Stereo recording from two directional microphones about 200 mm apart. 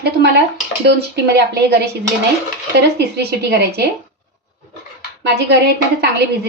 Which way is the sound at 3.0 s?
55° right (ahead or behind).